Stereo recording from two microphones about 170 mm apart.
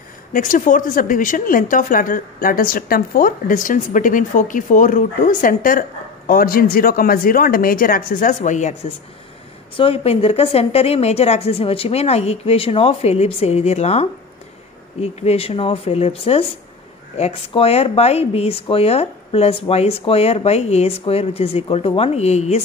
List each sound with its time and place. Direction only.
0.3 s a woman's voice: 55° left (ahead or behind)
9.8 s speech: 35° left (ahead or behind)